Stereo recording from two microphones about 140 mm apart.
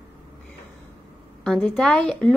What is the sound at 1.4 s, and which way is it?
Speech, 5° left (ahead or behind).